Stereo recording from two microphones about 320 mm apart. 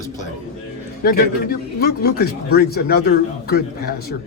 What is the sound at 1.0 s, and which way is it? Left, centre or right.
Speech, left.